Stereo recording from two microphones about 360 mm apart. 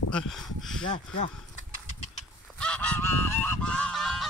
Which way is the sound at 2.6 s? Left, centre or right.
Centre.